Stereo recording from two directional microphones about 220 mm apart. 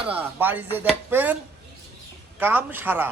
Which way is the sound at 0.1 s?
10° right (ahead or behind).